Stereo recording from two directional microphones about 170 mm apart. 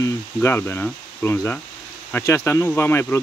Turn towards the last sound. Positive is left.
turn(degrees=15)  # may be behind; listen again after turning